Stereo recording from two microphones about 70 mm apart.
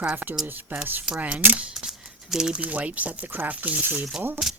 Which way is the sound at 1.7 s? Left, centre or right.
Centre.